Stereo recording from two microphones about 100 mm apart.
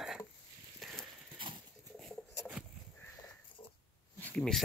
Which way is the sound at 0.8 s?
5° left (ahead or behind).